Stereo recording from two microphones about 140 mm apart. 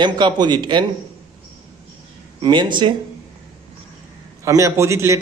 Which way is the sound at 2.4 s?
35° right (ahead or behind).